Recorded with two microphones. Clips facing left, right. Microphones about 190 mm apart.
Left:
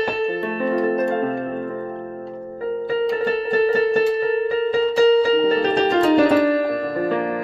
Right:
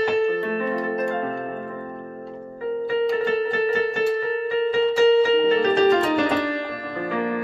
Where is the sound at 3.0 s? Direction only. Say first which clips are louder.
Even; 35° left (ahead or behind).